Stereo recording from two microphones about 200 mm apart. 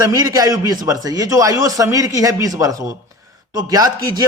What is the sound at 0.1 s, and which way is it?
A man's voice, 20° right (ahead or behind).